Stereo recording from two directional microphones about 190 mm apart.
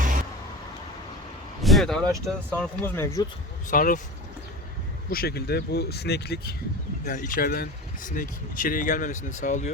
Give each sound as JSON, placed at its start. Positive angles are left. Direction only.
{"t": 0.0, "sound": "vehicle", "side_deg": -45}
{"t": 1.6, "sound": "vehicle", "side_deg": 0}
{"t": 2.0, "sound": "speech", "side_deg": -15}
{"t": 2.5, "sound": "speech", "side_deg": 10}
{"t": 3.7, "sound": "speech", "side_deg": 45}
{"t": 5.1, "sound": "speech", "side_deg": 55}
{"t": 7.0, "sound": "speech", "side_deg": 45}